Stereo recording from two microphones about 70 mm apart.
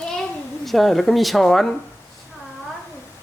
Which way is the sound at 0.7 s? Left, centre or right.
Centre.